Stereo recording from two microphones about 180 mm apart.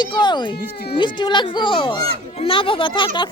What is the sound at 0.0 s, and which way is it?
Cat, 25° left (ahead or behind).